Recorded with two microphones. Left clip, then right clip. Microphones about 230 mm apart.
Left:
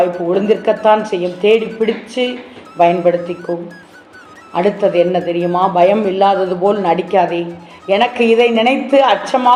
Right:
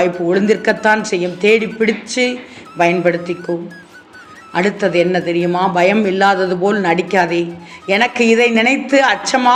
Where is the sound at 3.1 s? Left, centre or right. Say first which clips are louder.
Left 2 dB; centre.